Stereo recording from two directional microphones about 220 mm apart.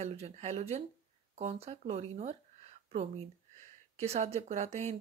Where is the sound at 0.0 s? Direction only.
30° right (ahead or behind).